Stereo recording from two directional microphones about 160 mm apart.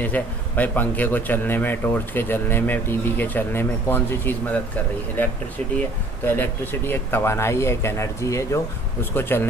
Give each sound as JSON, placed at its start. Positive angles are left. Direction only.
{"t": 0.0, "sound": "a man's voice", "side_deg": 10}
{"t": 5.8, "sound": "a man's voice", "side_deg": 15}